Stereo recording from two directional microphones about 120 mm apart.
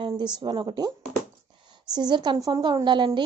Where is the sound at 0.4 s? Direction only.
35° right (ahead or behind).